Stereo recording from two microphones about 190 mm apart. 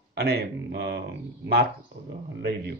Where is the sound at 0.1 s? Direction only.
60° right (ahead or behind).